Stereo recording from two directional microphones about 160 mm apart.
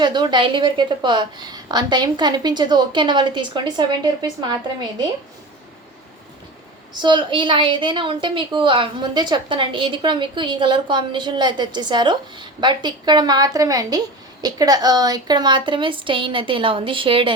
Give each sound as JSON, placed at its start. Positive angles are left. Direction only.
{"t": 0.0, "sound": "a woman's voice", "side_deg": -30}
{"t": 6.9, "sound": "a woman's voice", "side_deg": -30}